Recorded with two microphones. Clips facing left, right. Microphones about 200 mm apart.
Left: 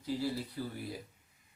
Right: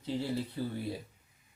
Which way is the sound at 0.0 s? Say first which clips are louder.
Right 1 dB; 25° right (ahead or behind).